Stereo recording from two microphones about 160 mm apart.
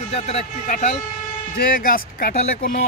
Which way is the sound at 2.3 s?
45° left (ahead or behind).